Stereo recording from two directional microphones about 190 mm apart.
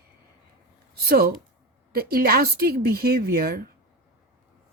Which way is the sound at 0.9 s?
55° right (ahead or behind).